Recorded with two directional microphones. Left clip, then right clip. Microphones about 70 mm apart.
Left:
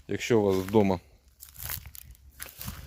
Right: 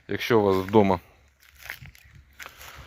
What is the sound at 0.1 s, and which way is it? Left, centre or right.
Speech, left.